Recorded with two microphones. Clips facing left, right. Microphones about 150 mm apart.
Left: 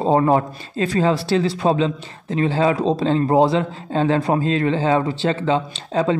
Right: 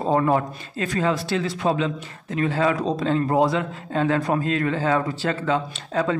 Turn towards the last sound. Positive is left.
turn(degrees=25)  # may be behind; listen again after turning